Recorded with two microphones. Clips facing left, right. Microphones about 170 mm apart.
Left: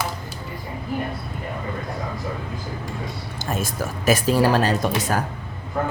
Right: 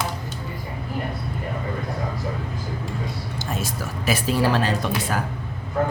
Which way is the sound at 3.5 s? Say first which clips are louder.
Left 4 dB; 50° left (ahead or behind).